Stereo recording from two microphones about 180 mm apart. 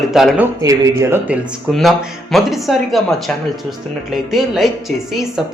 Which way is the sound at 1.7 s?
Centre (ahead or behind).